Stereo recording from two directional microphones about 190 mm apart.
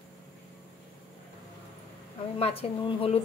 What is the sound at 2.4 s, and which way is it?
Speech, 30° left (ahead or behind).